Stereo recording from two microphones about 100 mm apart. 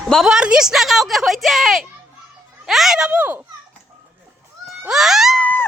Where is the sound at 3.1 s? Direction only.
20° right (ahead or behind).